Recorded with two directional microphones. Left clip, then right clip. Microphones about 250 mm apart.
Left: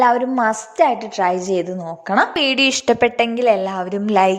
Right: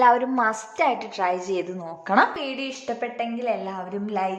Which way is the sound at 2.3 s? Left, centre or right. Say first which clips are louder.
Left 14 dB; left.